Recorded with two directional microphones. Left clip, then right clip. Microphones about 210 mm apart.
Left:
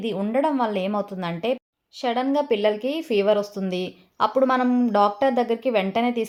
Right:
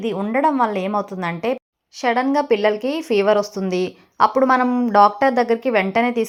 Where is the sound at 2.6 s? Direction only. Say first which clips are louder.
Right 3 dB; 10° right (ahead or behind).